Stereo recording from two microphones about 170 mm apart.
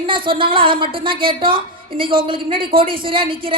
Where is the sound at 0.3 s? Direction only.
30° right (ahead or behind).